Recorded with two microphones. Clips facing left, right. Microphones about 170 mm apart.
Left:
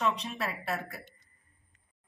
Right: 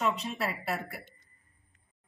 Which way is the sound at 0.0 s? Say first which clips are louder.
Right 1 dB; 5° right (ahead or behind).